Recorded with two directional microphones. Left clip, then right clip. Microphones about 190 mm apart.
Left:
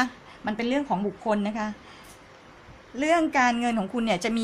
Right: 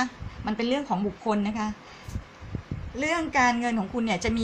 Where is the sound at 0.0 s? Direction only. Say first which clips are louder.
Left 2 dB; 35° left (ahead or behind).